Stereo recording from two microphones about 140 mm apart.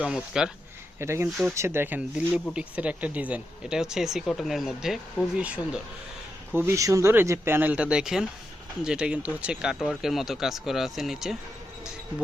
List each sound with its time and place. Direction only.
0.0 s speech: 5° right (ahead or behind)
0.9 s speech: 20° right (ahead or behind)
6.7 s speech: 25° right (ahead or behind); by 11.3 s centre (ahead or behind)